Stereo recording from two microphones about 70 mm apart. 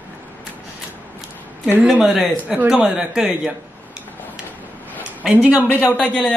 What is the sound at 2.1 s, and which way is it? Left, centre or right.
Speech, centre.